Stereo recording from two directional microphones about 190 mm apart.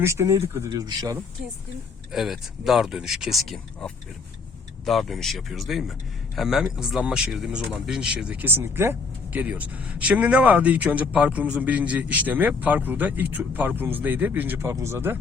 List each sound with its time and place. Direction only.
0.0 s speech: 15° right (ahead or behind)
2.1 s speech: centre (ahead or behind)